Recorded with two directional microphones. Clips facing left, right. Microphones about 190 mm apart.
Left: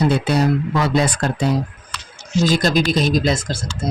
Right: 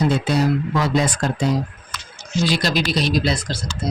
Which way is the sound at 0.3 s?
65° left (ahead or behind).